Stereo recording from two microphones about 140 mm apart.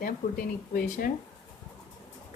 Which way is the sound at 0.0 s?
90° left.